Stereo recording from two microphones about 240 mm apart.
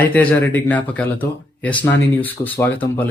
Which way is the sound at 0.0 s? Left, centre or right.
Centre.